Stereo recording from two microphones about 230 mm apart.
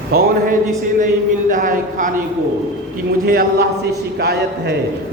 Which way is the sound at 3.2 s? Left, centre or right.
Right.